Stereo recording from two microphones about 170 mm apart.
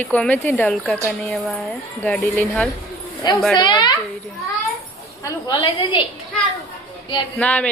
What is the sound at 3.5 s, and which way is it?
Speech, 25° left (ahead or behind).